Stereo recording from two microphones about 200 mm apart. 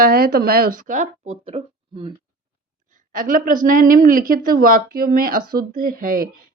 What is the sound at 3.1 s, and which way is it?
Speech, 45° right (ahead or behind).